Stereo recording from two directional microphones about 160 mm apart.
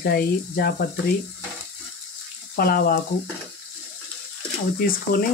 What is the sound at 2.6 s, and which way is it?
Speech, 70° left (ahead or behind).